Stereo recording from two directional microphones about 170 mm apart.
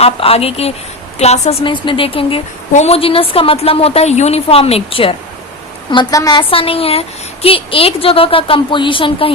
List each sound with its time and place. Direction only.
0.0 s a woman's voice: 35° left (ahead or behind)